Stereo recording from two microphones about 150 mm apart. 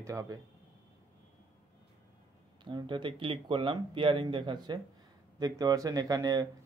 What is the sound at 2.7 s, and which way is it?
Speech, 30° right (ahead or behind).